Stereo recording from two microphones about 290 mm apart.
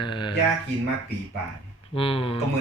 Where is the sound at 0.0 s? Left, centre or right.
Centre.